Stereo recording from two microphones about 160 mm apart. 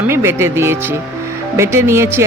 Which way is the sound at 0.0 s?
15° right (ahead or behind).